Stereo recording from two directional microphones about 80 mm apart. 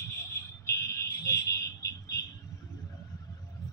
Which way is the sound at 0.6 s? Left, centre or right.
Left.